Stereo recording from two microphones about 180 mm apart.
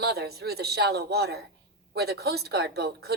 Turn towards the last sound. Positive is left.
turn(degrees=-60)  # may be behind; listen again after turning